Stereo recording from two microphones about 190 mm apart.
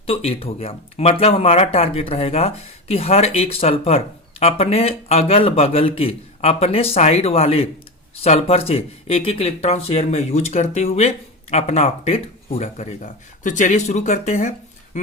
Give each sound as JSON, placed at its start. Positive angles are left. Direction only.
{"t": 0.0, "sound": "speech", "side_deg": 30}